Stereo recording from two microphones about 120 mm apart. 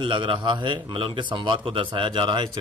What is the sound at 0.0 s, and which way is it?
Speech, 45° right (ahead or behind).